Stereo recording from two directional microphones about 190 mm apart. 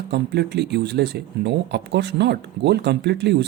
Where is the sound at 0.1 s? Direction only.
60° right (ahead or behind).